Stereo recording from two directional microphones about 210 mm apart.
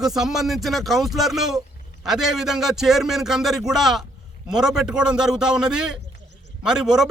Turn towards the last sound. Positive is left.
turn(degrees=-5)  # may be behind; listen again after turning